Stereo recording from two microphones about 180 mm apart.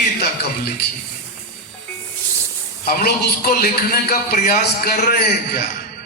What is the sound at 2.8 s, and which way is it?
A man's voice, 60° left (ahead or behind).